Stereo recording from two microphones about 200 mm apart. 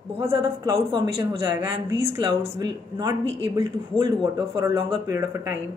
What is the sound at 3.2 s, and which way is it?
Speech, 65° right (ahead or behind).